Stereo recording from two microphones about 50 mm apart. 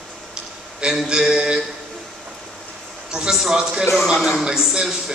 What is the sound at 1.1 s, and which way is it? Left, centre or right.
Speech, centre.